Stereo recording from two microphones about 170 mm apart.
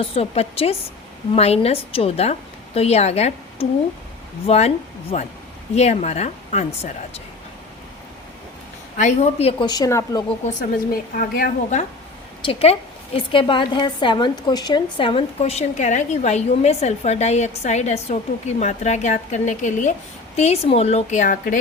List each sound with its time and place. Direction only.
0.0 s a woman's voice: 35° left (ahead or behind)
9.0 s a woman's voice: 40° left (ahead or behind); by 10.2 s 20° left (ahead or behind)
10.4 s a woman's voice: 50° left (ahead or behind)
12.5 s a woman's voice: 35° left (ahead or behind)